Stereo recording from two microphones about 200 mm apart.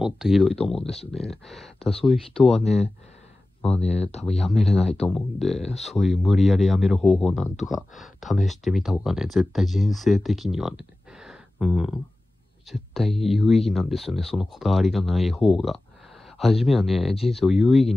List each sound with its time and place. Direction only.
0.0 s speech: centre (ahead or behind)
0.7 s speech: 30° left (ahead or behind)
1.1 s speech: centre (ahead or behind)
1.8 s speech: 30° left (ahead or behind)
4.5 s speech: centre (ahead or behind)
4.7 s speech: 30° left (ahead or behind)
5.0 s speech: centre (ahead or behind)
5.6 s speech: 30° left (ahead or behind)
5.9 s speech: centre (ahead or behind)